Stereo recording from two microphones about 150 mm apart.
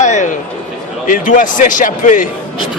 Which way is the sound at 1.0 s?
65° left (ahead or behind).